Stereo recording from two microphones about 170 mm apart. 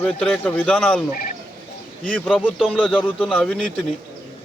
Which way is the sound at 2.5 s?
Centre (ahead or behind).